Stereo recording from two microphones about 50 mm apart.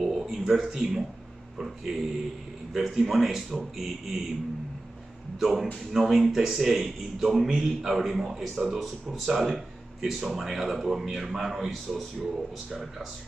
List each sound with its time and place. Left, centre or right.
0.0 s a sound: centre
0.5 s speech: centre
1.9 s speech: centre
2.7 s speech: centre
5.4 s speech: centre